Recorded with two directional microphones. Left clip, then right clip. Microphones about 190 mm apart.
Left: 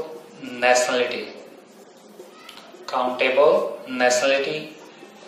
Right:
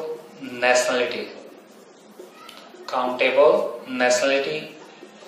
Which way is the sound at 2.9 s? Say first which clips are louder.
Even; 10° left (ahead or behind).